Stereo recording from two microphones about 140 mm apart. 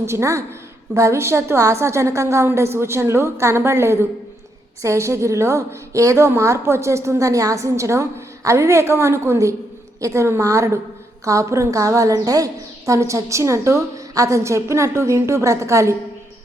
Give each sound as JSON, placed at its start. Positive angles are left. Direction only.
{"t": 0.0, "sound": "a woman's voice", "side_deg": -20}